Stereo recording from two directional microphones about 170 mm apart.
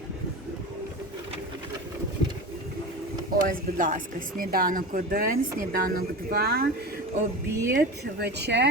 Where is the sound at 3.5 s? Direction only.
50° right (ahead or behind).